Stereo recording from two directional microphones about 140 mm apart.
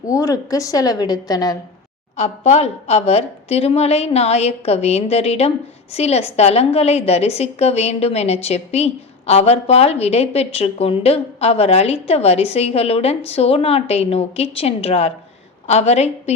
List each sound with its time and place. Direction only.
0.1 s a woman's voice: 25° left (ahead or behind)
2.1 s a woman's voice: 50° left (ahead or behind)